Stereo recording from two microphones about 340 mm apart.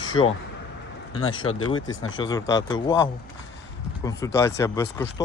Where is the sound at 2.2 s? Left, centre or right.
Centre.